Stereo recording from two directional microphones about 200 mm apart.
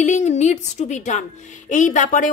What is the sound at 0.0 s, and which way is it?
A woman's voice, 35° left (ahead or behind).